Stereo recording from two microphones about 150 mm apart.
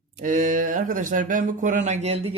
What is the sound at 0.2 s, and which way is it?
Speech, 60° right (ahead or behind).